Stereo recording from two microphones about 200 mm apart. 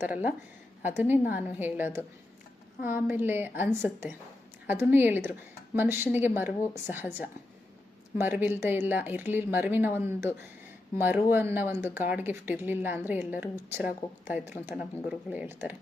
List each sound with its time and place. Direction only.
0.0 s speech: 5° right (ahead or behind)